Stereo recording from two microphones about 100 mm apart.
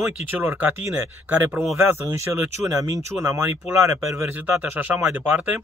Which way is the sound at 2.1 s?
30° right (ahead or behind).